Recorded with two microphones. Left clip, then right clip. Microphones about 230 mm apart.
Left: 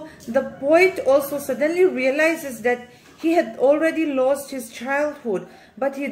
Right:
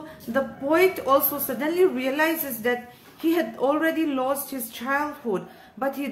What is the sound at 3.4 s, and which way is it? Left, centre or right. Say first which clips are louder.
Speech: left 8 dB; centre.